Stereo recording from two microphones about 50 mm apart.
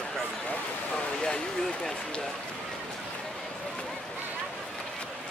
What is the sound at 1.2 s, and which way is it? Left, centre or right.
Speech, centre.